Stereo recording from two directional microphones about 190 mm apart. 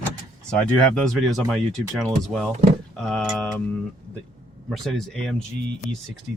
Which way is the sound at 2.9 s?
Centre (ahead or behind).